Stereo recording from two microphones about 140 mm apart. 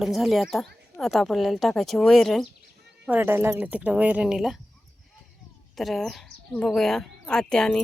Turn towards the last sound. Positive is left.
turn(degrees=5)  # may be behind; listen again after turning